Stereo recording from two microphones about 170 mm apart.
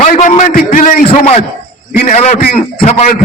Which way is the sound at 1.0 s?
40° left (ahead or behind).